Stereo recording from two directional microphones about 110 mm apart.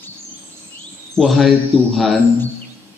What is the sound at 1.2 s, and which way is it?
Speech, centre (ahead or behind).